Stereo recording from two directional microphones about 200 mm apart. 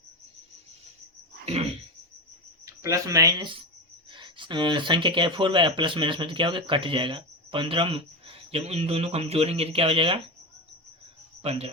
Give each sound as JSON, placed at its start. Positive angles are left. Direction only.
{"t": 2.6, "sound": "speech", "side_deg": -15}
{"t": 11.4, "sound": "speech", "side_deg": -30}